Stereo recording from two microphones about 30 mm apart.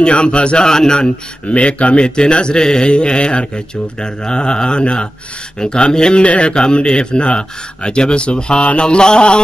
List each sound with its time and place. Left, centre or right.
0.1 s mantra: left
0.7 s a man's voice: centre
1.5 s speech: left
2.0 s mantra: left
2.6 s a man's voice: centre
2.9 s mantra: left
5.6 s speech: left
6.1 s speech: left
6.5 s speech: left
6.8 s mantra: left